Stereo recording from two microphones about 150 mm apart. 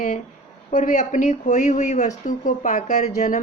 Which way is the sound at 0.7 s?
60° left (ahead or behind).